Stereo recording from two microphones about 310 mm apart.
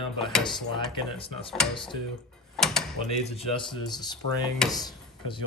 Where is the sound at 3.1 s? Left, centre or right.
Centre.